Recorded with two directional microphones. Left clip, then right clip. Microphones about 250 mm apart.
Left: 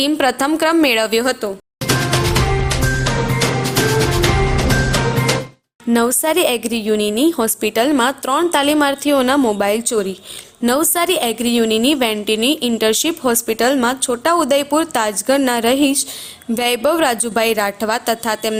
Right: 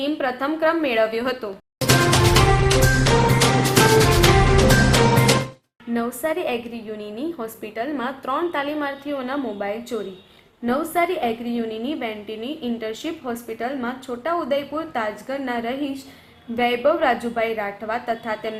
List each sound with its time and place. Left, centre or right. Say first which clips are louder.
0.0 s a woman's voice: left 8 dB; left
1.2 s a woman's voice: left 7 dB; left
1.9 s music: even; centre
4.2 s music: right 1 dB; centre
5.9 s a woman's voice: left 8 dB; left